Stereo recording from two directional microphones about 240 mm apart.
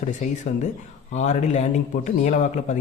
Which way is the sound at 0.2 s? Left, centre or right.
Left.